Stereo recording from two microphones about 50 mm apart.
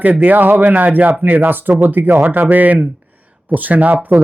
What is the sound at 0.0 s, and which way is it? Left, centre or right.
A man's voice, right.